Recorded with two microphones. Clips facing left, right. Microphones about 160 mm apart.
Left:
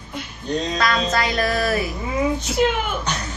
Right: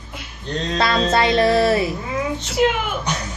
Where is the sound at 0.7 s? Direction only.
30° right (ahead or behind).